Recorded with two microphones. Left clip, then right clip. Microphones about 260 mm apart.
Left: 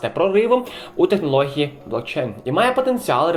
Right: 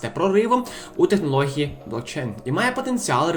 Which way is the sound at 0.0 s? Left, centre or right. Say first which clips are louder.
Left 3 dB; right.